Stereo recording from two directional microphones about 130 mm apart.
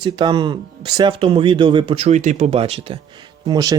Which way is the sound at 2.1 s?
60° right (ahead or behind).